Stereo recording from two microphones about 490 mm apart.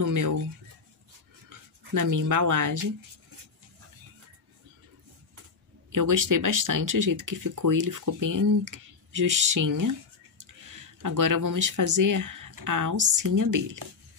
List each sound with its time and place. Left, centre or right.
0.0 s speech: right
1.5 s speech: right
5.9 s speech: right